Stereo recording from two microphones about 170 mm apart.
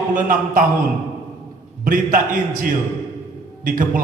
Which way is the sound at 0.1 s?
50° right (ahead or behind).